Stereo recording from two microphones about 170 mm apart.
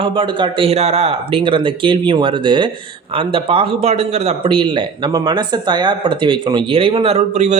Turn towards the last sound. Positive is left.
turn(degrees=-40)  # may be behind; listen again after turning